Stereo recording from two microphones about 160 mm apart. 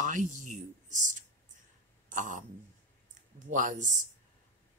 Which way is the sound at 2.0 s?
55° right (ahead or behind).